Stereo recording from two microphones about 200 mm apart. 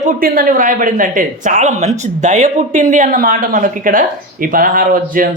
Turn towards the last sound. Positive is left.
turn(degrees=-45)  # may be behind; listen again after turning